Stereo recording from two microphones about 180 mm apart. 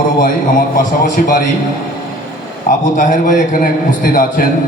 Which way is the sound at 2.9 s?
45° left (ahead or behind).